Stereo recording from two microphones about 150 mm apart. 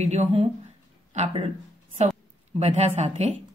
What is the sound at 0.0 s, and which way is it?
Speech, 50° right (ahead or behind).